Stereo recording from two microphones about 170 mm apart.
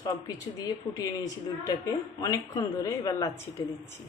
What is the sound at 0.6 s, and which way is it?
A woman's voice, 20° left (ahead or behind).